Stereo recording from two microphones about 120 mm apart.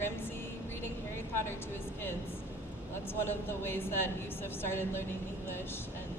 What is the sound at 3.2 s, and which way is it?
A woman's voice, 20° left (ahead or behind).